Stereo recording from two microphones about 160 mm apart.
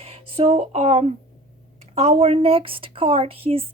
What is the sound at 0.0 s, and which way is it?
A woman's voice, 40° right (ahead or behind).